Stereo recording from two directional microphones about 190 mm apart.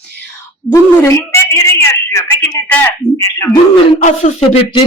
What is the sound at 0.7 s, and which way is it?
A man's voice, 15° left (ahead or behind).